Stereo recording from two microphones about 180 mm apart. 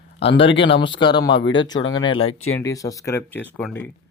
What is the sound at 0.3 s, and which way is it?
Speech, 85° left.